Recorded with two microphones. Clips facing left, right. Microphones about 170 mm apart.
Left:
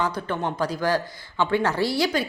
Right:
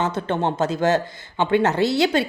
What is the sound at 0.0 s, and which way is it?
Speech, 25° right (ahead or behind).